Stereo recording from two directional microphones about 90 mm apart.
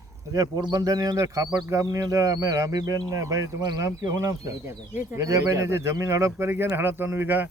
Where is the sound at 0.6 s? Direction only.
45° right (ahead or behind).